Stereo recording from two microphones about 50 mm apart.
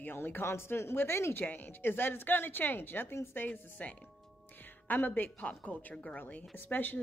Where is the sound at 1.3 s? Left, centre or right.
Left.